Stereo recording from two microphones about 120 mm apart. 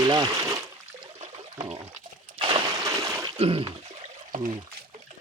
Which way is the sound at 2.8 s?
25° right (ahead or behind).